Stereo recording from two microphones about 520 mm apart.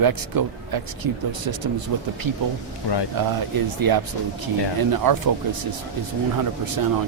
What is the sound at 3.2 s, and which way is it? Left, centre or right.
Speech, right.